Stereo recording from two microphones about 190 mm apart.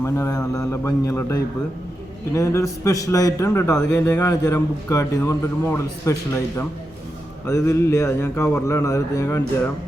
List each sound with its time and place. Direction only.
0.0 s a man's voice: 15° left (ahead or behind)